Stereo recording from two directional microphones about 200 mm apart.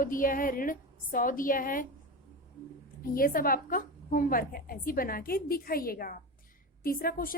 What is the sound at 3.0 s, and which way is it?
A woman's voice, 45° left (ahead or behind).